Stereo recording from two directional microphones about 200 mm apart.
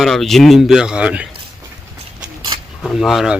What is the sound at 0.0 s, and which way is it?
Speech, centre (ahead or behind).